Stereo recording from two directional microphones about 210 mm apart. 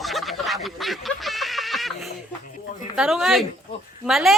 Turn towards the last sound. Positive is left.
turn(degrees=0)  # may be behind; listen again after turning